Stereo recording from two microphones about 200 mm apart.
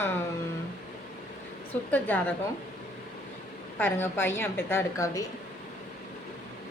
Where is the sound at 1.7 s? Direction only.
10° left (ahead or behind).